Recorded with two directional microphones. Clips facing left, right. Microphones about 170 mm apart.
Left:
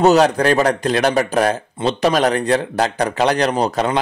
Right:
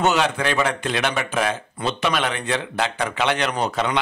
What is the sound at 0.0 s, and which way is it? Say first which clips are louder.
A man's voice: left 8 dB; 40° left (ahead or behind).